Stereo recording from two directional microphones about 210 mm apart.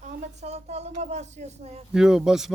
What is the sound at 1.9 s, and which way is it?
Speech, centre (ahead or behind).